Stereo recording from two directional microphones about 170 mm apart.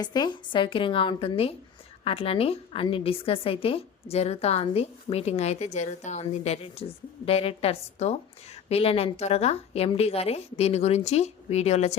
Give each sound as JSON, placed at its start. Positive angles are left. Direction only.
{"t": 0.0, "sound": "a woman's voice", "side_deg": 25}